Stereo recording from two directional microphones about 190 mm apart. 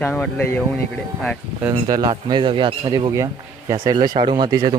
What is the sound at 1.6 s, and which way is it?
Speech, 15° right (ahead or behind).